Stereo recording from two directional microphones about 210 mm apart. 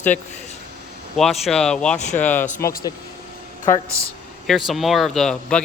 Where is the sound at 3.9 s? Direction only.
15° right (ahead or behind).